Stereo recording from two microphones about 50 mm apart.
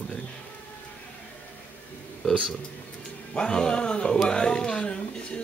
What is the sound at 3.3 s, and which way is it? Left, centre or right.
Speech, centre.